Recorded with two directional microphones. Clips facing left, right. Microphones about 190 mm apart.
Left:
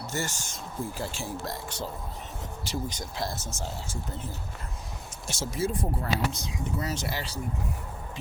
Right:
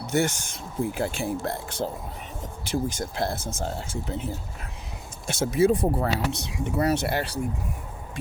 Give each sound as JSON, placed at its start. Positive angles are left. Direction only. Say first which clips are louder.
{"t": 0.1, "sound": "speech", "louder": "right 11 dB", "side_deg": -60}
{"t": 5.3, "sound": "speech", "louder": "right 9 dB", "side_deg": -60}